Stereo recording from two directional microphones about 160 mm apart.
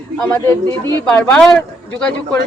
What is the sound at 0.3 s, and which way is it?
A woman's voice, 15° left (ahead or behind).